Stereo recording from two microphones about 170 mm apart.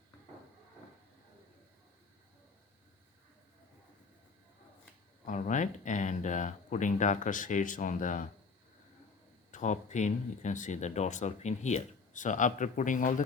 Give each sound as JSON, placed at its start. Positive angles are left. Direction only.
{"t": 5.2, "sound": "speech", "side_deg": 45}
{"t": 9.5, "sound": "speech", "side_deg": 45}